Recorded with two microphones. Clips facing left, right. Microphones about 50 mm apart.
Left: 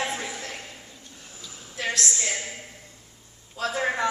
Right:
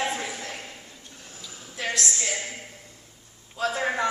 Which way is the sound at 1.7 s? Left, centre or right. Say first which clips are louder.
Left 1 dB; centre.